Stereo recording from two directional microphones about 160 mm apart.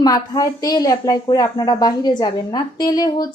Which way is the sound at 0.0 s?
25° left (ahead or behind).